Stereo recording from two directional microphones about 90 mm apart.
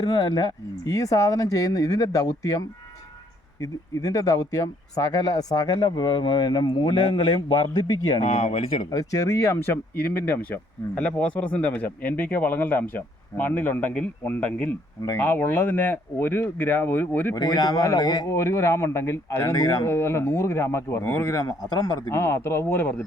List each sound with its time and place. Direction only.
0.0 s speech: 50° left (ahead or behind)
0.9 s speech: 40° left (ahead or behind)
8.9 s speech: 40° left (ahead or behind)
9.6 s speech: 20° left (ahead or behind)
17.3 s speech: 50° left (ahead or behind)
18.3 s speech: 30° left (ahead or behind)
21.2 s speech: 40° left (ahead or behind)
22.1 s speech: 25° left (ahead or behind)